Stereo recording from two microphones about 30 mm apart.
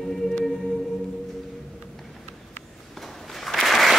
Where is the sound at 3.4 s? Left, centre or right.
Centre.